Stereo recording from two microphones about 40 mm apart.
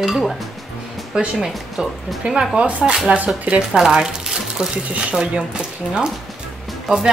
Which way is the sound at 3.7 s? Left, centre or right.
Centre.